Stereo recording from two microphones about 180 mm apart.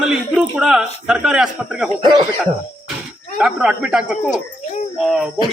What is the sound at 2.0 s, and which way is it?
Speech, 25° right (ahead or behind).